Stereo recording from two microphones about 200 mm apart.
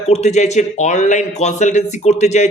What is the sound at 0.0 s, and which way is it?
A man's voice, 35° left (ahead or behind).